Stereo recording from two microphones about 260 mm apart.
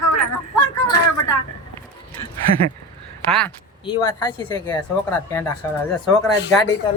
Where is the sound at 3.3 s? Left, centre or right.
Centre.